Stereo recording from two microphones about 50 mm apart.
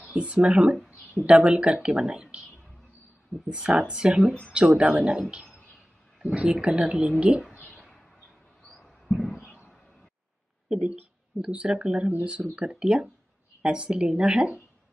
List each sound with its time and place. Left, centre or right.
0.1 s speech: right
3.4 s speech: centre
6.3 s speech: right
7.6 s a sound: centre
8.6 s a sound: centre
10.7 s speech: right